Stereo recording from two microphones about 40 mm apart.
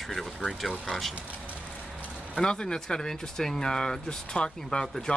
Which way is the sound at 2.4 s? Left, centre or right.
Left.